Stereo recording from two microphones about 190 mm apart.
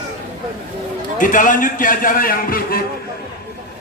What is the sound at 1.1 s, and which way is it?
A man's voice, 45° left (ahead or behind).